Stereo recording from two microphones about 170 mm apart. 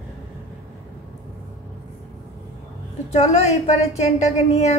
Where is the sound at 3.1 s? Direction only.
40° left (ahead or behind).